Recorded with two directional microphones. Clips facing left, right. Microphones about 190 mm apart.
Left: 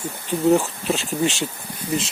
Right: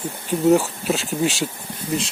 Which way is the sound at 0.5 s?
Centre (ahead or behind).